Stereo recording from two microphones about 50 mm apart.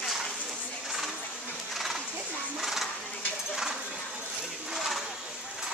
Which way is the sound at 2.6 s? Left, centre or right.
Centre.